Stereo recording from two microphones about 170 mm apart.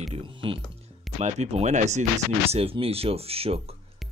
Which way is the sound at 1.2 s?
40° right (ahead or behind).